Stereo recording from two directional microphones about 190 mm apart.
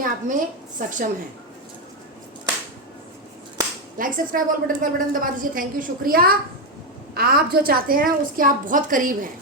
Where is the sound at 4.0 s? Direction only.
45° right (ahead or behind).